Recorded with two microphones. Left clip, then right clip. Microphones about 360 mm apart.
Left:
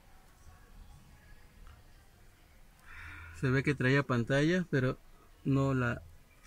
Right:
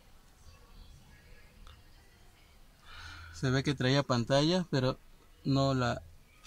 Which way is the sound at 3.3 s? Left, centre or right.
Centre.